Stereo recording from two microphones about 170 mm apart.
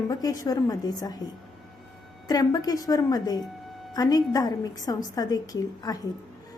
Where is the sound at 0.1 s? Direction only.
20° left (ahead or behind).